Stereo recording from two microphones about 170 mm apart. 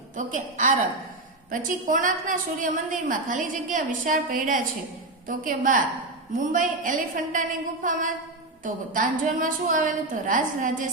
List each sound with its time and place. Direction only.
0.2 s a woman's voice: 50° right (ahead or behind)